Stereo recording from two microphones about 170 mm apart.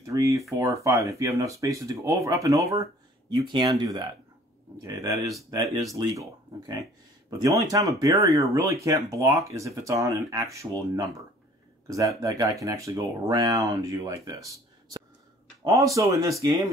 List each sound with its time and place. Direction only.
0.0 s a sound: 20° right (ahead or behind)
0.6 s speech: 20° right (ahead or behind)
12.2 s speech: 20° right (ahead or behind)
15.6 s speech: 20° right (ahead or behind)